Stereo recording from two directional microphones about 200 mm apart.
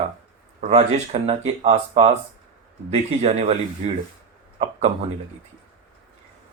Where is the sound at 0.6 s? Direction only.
35° right (ahead or behind).